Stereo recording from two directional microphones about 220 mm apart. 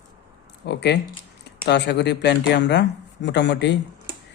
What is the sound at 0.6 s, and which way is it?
Speech, 50° left (ahead or behind).